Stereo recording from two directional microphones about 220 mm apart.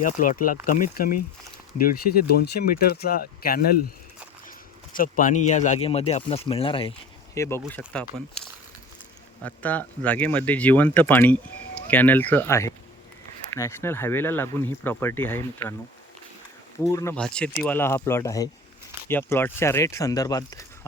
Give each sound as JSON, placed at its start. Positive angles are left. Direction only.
{"t": 0.0, "sound": "speech", "side_deg": 35}
{"t": 4.9, "sound": "speech", "side_deg": 40}
{"t": 7.3, "sound": "speech", "side_deg": 10}
{"t": 16.9, "sound": "speech", "side_deg": 15}